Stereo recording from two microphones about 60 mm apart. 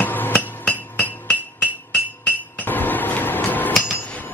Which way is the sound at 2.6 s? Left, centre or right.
Left.